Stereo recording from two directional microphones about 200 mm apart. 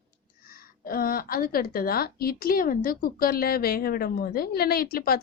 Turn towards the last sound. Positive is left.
turn(degrees=50)  # may be behind; listen again after turning